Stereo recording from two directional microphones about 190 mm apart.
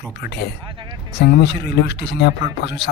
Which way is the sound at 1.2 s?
60° left (ahead or behind).